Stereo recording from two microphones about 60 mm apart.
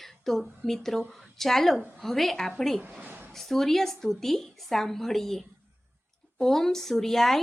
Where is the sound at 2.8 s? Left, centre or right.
Right.